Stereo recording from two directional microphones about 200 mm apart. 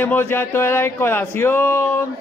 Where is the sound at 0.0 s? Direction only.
10° left (ahead or behind).